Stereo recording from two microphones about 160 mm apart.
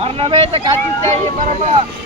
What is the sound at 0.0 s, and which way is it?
Speech, 35° right (ahead or behind).